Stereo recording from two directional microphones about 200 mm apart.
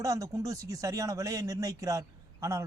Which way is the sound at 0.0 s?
15° right (ahead or behind).